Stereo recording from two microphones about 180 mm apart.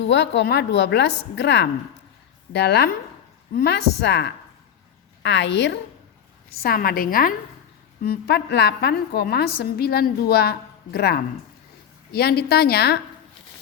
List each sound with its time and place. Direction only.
0.1 s a woman's voice: 75° left (ahead or behind)
6.5 s a woman's voice: 55° left (ahead or behind)
8.0 s a woman's voice: 65° left (ahead or behind)